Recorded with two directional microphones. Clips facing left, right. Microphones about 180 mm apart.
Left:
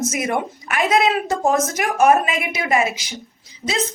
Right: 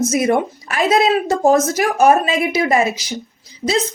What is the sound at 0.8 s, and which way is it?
Speech, 20° left (ahead or behind).